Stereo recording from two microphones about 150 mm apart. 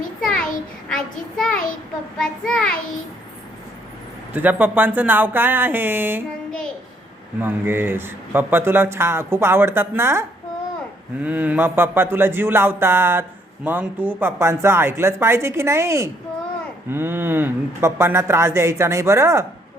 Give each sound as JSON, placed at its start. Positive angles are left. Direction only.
{"t": 0.2, "sound": "a sound", "side_deg": 5}
{"t": 0.9, "sound": "a child's voice", "side_deg": 5}
{"t": 4.4, "sound": "speech", "side_deg": -10}
{"t": 7.3, "sound": "speech", "side_deg": -15}